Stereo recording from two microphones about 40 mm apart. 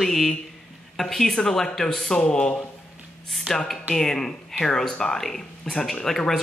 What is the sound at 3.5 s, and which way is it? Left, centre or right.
Speech, right.